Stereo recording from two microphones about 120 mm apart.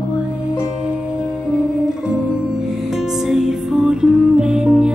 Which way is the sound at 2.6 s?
5° right (ahead or behind).